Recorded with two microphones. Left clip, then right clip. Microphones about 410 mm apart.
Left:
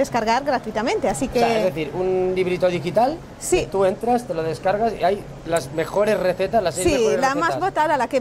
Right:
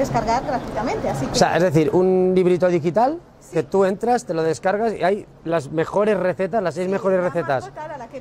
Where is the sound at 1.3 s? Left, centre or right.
Right.